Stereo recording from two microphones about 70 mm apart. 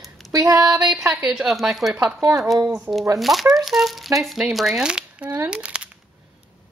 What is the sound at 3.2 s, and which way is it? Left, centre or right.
Speech, centre.